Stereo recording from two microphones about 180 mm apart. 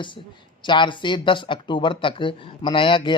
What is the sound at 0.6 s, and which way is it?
Speech, 25° left (ahead or behind).